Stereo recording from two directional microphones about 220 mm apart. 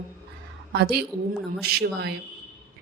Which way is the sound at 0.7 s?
45° right (ahead or behind).